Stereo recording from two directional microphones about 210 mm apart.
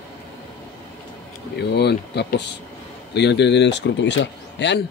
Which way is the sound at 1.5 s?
55° left (ahead or behind).